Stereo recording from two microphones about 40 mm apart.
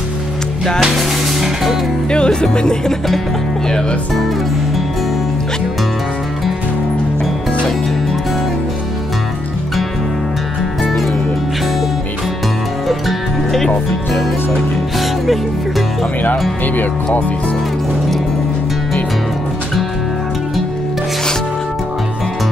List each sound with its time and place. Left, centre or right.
0.7 s speech: centre
2.0 s music: left